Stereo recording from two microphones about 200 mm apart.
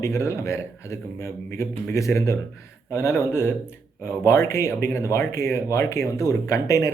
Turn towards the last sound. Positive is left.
turn(degrees=15)  # may be behind; listen again after turning